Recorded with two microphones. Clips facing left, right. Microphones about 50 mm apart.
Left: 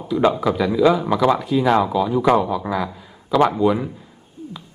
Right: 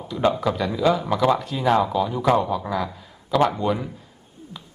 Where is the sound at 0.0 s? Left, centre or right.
Centre.